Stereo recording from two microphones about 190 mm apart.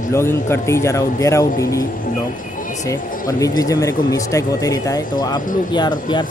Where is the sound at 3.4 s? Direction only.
20° left (ahead or behind).